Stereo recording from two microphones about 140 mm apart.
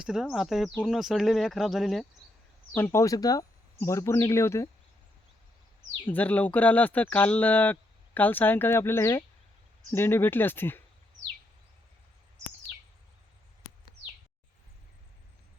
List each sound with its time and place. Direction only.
0.0 s speech: 5° right (ahead or behind)
2.7 s speech: 15° left (ahead or behind)
6.1 s speech: 10° left (ahead or behind)